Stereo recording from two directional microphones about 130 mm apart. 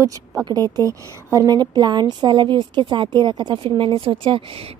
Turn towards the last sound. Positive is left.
turn(degrees=-45)  # may be behind; listen again after turning